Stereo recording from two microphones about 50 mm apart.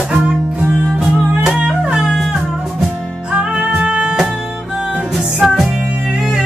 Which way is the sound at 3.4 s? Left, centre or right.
Centre.